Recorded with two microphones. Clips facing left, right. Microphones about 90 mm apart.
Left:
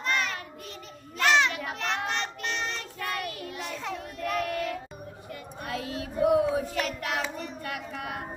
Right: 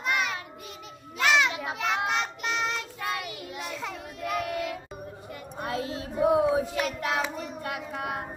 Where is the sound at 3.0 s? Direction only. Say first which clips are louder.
Left 1 dB; 15° right (ahead or behind).